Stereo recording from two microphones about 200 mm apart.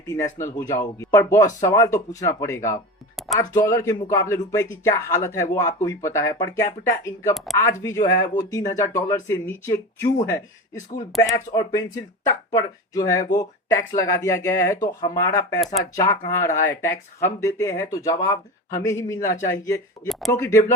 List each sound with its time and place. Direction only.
0.3 s speech: 15° left (ahead or behind)
20.1 s speech: centre (ahead or behind)